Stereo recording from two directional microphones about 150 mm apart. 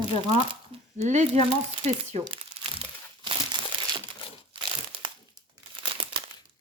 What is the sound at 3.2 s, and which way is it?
Crumpling, 35° right (ahead or behind).